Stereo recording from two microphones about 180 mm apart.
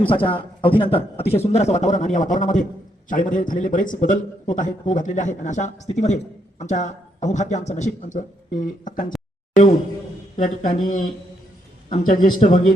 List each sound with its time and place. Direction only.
0.1 s a man's voice: 30° left (ahead or behind); by 9.0 s 45° left (ahead or behind)
10.3 s a man's voice: 45° left (ahead or behind)